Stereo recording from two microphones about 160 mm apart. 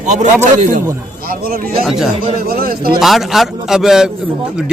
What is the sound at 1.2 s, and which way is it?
Speech, 65° right (ahead or behind).